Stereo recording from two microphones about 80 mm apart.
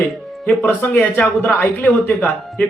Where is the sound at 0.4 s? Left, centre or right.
Left.